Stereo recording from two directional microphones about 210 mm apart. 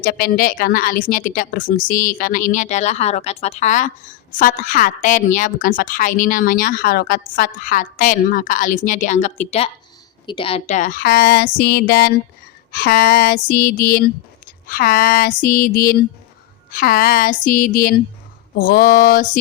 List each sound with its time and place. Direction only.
0.0 s a woman's voice: 45° left (ahead or behind)